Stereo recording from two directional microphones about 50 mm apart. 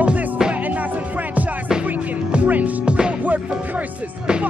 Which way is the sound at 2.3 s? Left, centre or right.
Right.